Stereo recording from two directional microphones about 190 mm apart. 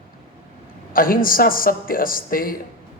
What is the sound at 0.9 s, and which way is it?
A man's voice, 50° left (ahead or behind).